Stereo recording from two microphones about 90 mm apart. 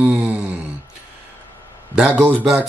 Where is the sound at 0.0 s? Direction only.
15° right (ahead or behind).